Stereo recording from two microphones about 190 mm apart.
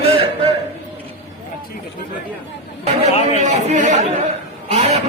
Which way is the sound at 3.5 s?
40° right (ahead or behind).